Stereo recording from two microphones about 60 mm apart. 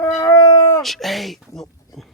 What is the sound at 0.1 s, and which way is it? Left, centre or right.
Cat, left.